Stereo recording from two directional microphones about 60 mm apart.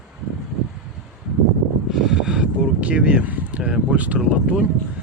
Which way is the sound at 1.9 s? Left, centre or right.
Centre.